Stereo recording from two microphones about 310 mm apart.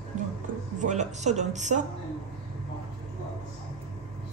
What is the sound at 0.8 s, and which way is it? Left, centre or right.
Speech, right.